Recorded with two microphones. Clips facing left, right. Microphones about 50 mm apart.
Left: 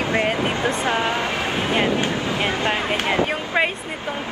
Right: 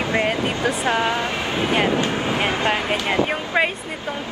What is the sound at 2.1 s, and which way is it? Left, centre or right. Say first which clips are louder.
Vehicle: right 1 dB; right.